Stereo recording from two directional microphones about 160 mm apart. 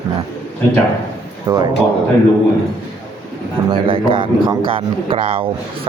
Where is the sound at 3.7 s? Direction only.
35° right (ahead or behind).